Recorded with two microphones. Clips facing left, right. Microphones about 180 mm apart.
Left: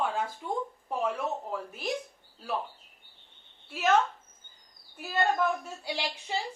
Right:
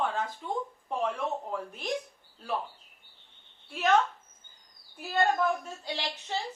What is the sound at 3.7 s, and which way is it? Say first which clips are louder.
Speech: even; 5° left (ahead or behind).